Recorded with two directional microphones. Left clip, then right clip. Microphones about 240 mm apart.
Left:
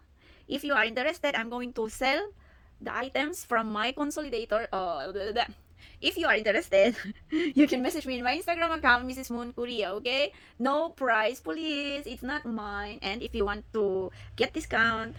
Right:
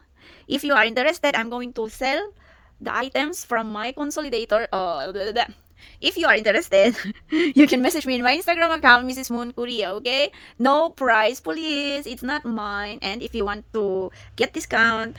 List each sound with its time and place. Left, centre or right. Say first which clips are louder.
0.4 s a woman's voice: right 8 dB; right
2.8 s speech: right 7 dB; right; by 4.2 s centre
4.2 s a woman's voice: right 10 dB; right